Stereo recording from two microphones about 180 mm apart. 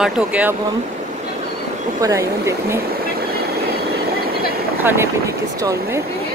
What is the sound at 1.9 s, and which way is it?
Speech, 15° right (ahead or behind).